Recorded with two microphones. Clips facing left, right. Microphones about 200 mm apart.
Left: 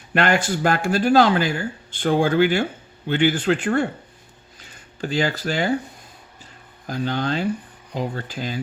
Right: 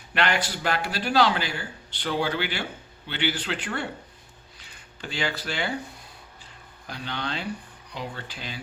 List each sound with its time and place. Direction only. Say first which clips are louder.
0.1 s speech: left 6 dB; 45° left (ahead or behind)
6.8 s speech: left 9 dB; 45° left (ahead or behind)